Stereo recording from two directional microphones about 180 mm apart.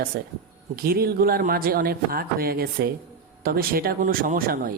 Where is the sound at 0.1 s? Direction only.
65° right (ahead or behind).